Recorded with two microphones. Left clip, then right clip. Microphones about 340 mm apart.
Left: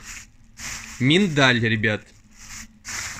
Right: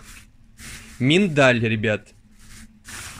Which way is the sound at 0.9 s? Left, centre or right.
Centre.